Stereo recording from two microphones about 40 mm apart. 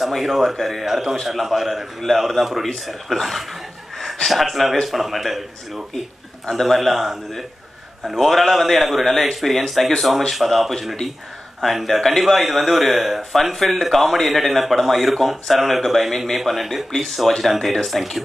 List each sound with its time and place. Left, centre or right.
0.0 s speech: centre
4.3 s speech: centre
6.5 s speech: centre
8.2 s speech: centre